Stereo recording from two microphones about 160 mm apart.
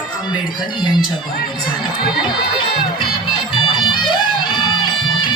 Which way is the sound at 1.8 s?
30° left (ahead or behind).